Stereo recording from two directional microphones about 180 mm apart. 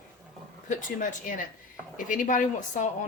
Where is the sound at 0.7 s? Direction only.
45° left (ahead or behind).